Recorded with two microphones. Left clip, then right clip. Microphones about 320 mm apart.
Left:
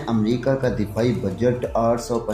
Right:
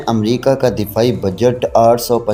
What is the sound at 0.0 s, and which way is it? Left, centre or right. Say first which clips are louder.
Speech: right 8 dB; right.